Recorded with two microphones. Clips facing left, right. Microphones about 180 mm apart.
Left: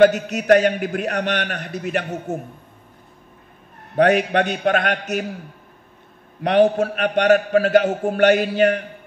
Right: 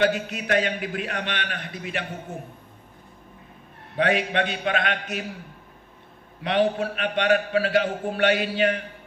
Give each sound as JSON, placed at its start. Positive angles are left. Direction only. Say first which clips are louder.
{"t": 0.0, "sound": "a man's voice", "louder": "left 9 dB", "side_deg": 45}
{"t": 3.9, "sound": "a man's voice", "louder": "left 7 dB", "side_deg": 45}
{"t": 6.4, "sound": "a man's voice", "louder": "left 7 dB", "side_deg": 45}